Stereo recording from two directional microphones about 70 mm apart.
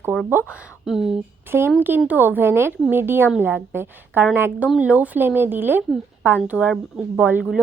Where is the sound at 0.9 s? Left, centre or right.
Centre.